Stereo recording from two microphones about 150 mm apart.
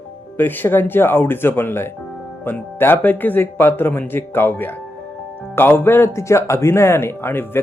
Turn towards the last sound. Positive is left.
turn(degrees=15)  # may be behind; listen again after turning